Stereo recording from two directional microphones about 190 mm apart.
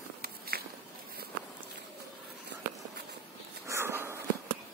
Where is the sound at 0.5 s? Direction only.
55° right (ahead or behind).